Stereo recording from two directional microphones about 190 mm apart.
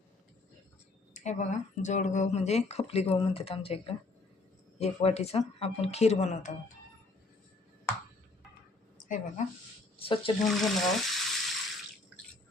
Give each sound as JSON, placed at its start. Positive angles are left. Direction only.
{"t": 1.1, "sound": "speech", "side_deg": 40}
{"t": 10.0, "sound": "speech", "side_deg": 25}
{"t": 10.4, "sound": "speech", "side_deg": 0}